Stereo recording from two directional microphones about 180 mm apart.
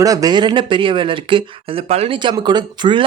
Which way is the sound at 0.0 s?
20° right (ahead or behind).